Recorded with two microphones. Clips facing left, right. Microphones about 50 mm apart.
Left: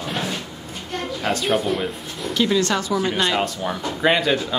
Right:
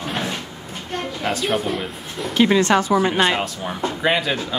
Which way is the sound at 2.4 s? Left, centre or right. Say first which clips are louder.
Right 4 dB; right.